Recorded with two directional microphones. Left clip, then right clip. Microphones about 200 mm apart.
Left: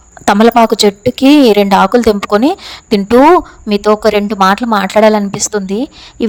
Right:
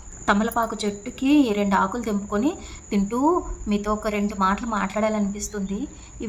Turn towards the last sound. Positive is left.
turn(degrees=45)  # may be behind; listen again after turning